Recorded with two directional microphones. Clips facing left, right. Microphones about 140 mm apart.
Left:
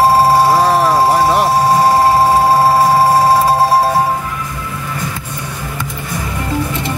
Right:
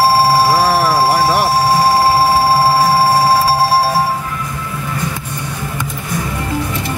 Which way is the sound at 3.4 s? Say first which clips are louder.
Left 2 dB; 20° left (ahead or behind).